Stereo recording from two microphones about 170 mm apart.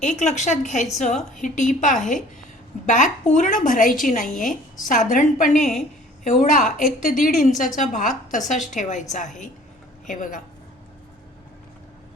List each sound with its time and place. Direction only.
0.0 s a woman's voice: 45° left (ahead or behind)